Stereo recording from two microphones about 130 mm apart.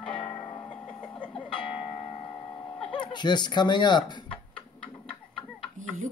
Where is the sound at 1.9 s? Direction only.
55° left (ahead or behind).